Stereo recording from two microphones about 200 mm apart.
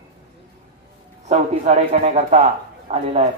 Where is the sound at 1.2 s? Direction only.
35° right (ahead or behind).